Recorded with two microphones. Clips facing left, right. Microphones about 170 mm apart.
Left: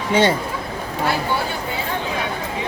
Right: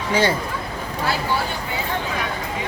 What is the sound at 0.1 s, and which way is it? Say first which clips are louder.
Speech: left 3 dB; 25° left (ahead or behind).